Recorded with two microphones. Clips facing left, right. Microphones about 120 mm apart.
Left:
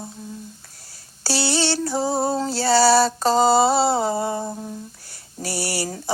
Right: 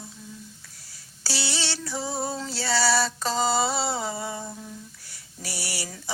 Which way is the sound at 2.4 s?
35° left (ahead or behind).